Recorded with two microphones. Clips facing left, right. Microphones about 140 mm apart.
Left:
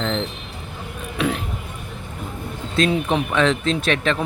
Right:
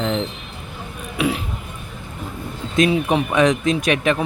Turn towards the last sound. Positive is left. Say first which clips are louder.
# right 2 dB
turn(degrees=-15)  # may be behind; listen again after turning